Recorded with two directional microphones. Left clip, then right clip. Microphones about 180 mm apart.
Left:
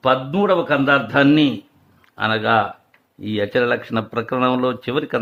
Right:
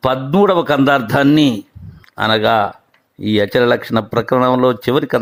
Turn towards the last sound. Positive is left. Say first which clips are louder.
# right 7 dB
turn(degrees=-40)  # may be behind; listen again after turning